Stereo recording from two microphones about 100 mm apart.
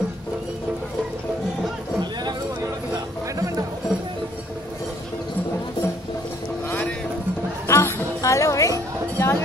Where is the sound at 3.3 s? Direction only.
35° right (ahead or behind).